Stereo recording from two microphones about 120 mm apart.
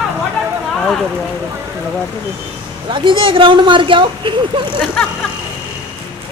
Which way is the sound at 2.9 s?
45° right (ahead or behind).